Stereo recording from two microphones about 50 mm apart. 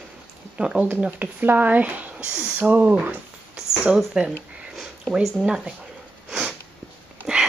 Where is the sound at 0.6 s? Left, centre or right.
Right.